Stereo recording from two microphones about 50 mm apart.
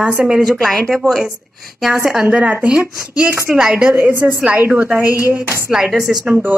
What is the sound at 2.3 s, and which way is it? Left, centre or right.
Speech, right.